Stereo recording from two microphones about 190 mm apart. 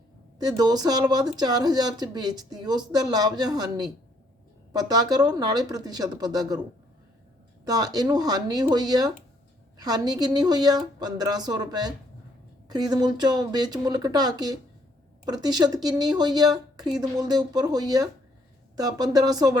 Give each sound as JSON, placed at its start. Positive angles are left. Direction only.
{"t": 0.3, "sound": "speech", "side_deg": -20}
{"t": 7.6, "sound": "speech", "side_deg": -20}